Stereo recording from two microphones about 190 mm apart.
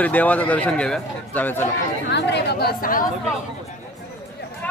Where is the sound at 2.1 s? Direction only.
60° left (ahead or behind).